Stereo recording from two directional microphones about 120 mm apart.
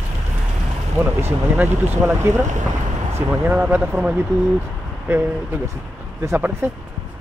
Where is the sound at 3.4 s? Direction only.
15° right (ahead or behind).